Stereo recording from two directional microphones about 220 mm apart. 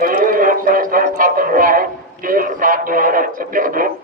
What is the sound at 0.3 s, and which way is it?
Music, 40° right (ahead or behind).